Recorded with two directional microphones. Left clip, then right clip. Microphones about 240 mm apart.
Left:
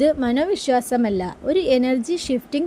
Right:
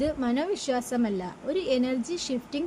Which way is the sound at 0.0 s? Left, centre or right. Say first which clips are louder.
Left 9 dB; left.